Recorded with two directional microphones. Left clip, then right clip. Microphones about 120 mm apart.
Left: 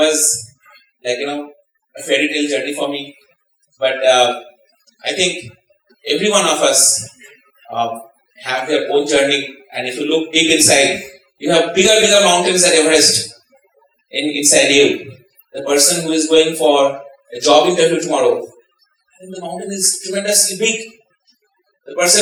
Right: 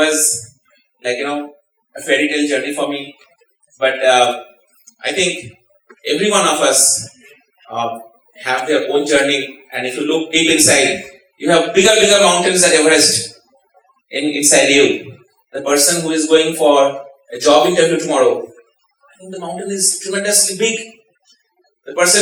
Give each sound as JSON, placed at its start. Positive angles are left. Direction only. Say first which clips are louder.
{"t": 0.0, "sound": "a man's voice", "louder": "left 1 dB", "side_deg": -25}
{"t": 8.3, "sound": "a sound", "louder": "right 3 dB", "side_deg": 20}
{"t": 8.5, "sound": "a man's voice", "louder": "even", "side_deg": -20}